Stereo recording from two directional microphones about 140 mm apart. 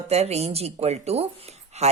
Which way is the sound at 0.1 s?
50° right (ahead or behind).